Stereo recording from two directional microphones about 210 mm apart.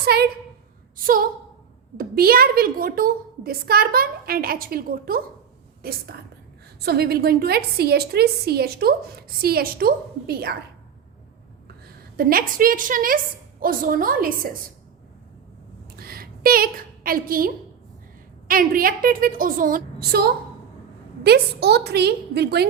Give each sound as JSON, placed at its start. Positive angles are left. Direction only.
{"t": 0.0, "sound": "a woman's voice", "side_deg": -50}
{"t": 12.1, "sound": "a woman's voice", "side_deg": -45}
{"t": 16.0, "sound": "a sound", "side_deg": -45}
{"t": 18.4, "sound": "a woman's voice", "side_deg": -40}